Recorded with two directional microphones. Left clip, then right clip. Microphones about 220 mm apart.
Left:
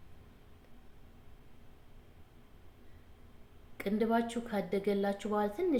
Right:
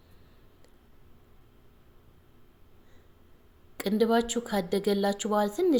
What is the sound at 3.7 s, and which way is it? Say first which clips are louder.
Speech: right 7 dB; 45° right (ahead or behind).